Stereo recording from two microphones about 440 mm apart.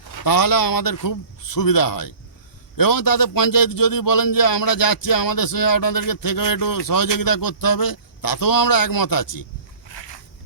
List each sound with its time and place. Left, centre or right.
0.2 s a man's voice: left